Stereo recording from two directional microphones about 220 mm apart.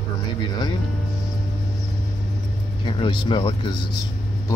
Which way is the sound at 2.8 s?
20° left (ahead or behind).